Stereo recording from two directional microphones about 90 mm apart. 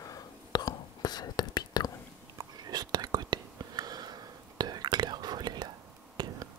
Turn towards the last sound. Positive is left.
turn(degrees=-55)  # may be behind; listen again after turning